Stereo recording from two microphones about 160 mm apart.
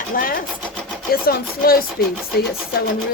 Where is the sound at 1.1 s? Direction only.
70° left (ahead or behind).